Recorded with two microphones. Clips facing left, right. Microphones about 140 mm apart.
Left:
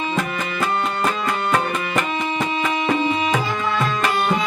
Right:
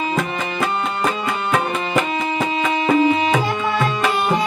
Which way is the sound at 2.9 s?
Centre (ahead or behind).